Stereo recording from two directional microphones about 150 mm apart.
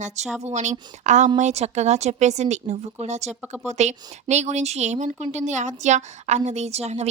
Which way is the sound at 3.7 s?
50° right (ahead or behind).